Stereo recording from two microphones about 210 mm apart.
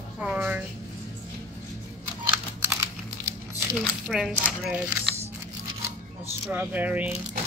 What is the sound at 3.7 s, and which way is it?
Speech, centre (ahead or behind).